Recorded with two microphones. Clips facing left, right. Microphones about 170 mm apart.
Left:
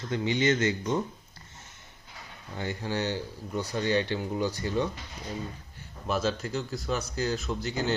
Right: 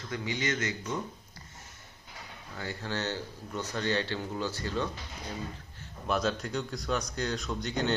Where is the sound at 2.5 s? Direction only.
20° left (ahead or behind).